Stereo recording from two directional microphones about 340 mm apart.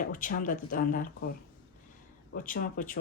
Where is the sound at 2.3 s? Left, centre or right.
Left.